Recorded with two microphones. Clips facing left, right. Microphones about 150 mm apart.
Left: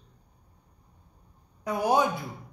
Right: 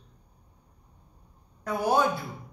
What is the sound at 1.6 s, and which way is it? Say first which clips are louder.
Speech: even; 15° left (ahead or behind).